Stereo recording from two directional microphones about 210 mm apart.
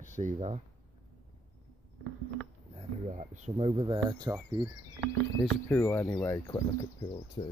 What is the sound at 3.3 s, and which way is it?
Speech, 30° right (ahead or behind).